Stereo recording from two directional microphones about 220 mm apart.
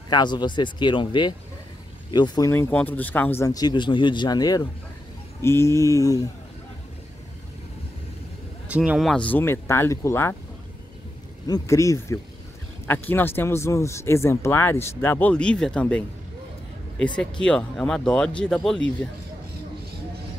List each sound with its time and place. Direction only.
0.1 s speech: 20° left (ahead or behind)
8.6 s speech: 5° right (ahead or behind); by 10.3 s 10° left (ahead or behind)
11.4 s speech: 15° left (ahead or behind)
17.2 s speech: 5° left (ahead or behind)